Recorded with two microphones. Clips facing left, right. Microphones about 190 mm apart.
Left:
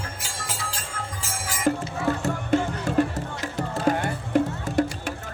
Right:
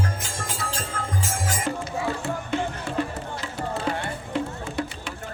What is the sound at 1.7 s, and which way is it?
Music, 40° left (ahead or behind).